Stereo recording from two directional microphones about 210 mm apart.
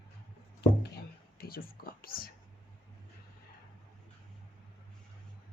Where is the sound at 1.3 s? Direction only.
45° left (ahead or behind).